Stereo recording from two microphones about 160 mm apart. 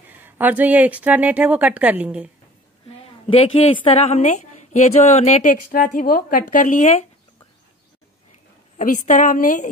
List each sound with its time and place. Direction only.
0.2 s a woman's voice: 10° right (ahead or behind)
3.3 s a woman's voice: 35° left (ahead or behind)
8.7 s a woman's voice: 55° left (ahead or behind)